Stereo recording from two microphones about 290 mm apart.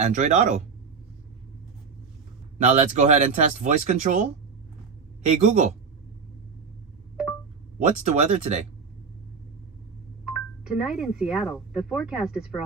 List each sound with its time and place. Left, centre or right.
0.0 s speech: right
2.6 s speech: right
5.4 s speech: right
7.9 s speech: right
10.2 s speech: centre